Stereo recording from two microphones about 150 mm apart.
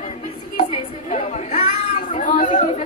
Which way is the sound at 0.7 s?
45° left (ahead or behind).